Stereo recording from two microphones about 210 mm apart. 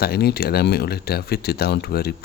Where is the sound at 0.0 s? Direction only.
50° left (ahead or behind).